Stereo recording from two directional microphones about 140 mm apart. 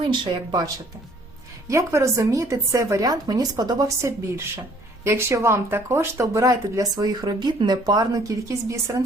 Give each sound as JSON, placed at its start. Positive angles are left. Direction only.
{"t": 0.1, "sound": "speech", "side_deg": -25}
{"t": 1.7, "sound": "speech", "side_deg": -20}